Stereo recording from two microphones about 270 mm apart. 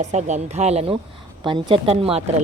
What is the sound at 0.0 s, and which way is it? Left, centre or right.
Speech, right.